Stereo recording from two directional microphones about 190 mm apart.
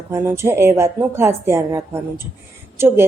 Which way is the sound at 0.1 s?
15° right (ahead or behind).